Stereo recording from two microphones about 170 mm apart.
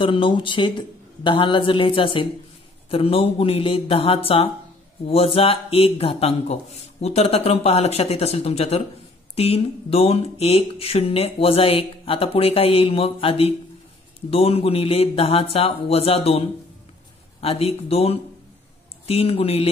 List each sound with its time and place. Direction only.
0.0 s speech: 30° left (ahead or behind)